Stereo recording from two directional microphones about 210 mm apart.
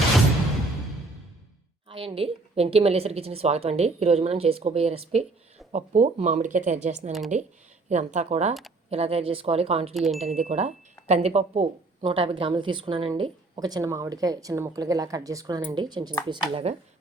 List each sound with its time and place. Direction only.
1.9 s speech: 25° right (ahead or behind)
9.9 s speech: centre (ahead or behind)
10.2 s speech: 30° right (ahead or behind)